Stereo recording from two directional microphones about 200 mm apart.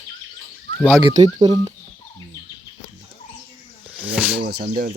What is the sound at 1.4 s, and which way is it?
Speech, 20° right (ahead or behind).